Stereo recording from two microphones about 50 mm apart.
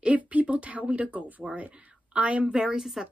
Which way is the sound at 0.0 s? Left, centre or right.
Right.